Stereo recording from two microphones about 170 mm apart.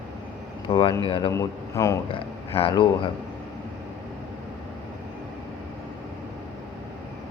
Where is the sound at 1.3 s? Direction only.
20° left (ahead or behind).